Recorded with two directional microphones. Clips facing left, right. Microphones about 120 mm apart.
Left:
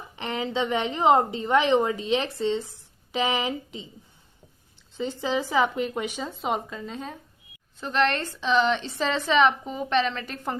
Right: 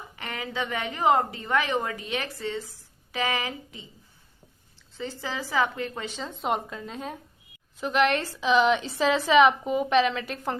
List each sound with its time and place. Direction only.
0.2 s a woman's voice: 25° left (ahead or behind)
4.9 s a woman's voice: 20° left (ahead or behind)
6.3 s a woman's voice: centre (ahead or behind)